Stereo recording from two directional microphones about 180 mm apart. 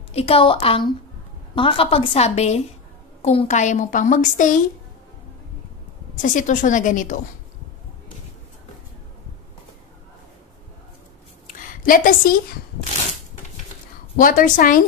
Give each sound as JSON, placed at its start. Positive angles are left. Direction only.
{"t": 0.1, "sound": "a woman's voice", "side_deg": 30}
{"t": 6.2, "sound": "a woman's voice", "side_deg": 45}
{"t": 11.4, "sound": "a sound", "side_deg": 50}
{"t": 14.1, "sound": "a woman's voice", "side_deg": 50}